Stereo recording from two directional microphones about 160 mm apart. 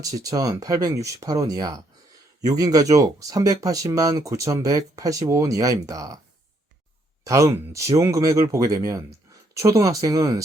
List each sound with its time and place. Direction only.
0.2 s speech: 20° right (ahead or behind)
7.3 s speech: 20° right (ahead or behind)